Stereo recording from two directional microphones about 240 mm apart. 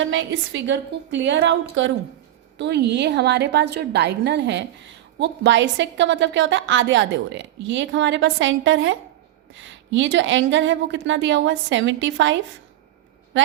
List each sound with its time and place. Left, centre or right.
0.0 s a woman's voice: right
2.6 s a woman's voice: right